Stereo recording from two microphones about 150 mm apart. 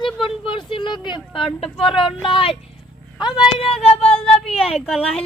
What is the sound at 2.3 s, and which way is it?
Speech, 35° left (ahead or behind).